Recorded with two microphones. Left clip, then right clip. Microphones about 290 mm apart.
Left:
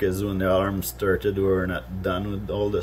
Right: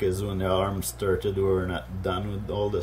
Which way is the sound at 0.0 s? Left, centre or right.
Centre.